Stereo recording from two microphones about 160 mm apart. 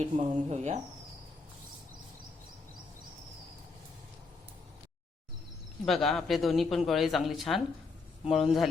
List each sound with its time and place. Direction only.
0.0 s speech: 45° right (ahead or behind)
5.8 s speech: centre (ahead or behind)